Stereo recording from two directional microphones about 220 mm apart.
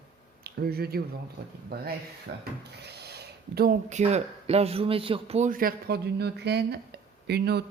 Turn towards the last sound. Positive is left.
turn(degrees=-45)  # may be behind; listen again after turning